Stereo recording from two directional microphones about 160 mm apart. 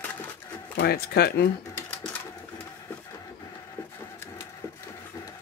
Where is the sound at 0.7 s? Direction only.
85° left.